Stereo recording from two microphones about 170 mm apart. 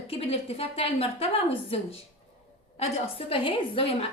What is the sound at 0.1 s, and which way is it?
A woman's voice, 35° left (ahead or behind).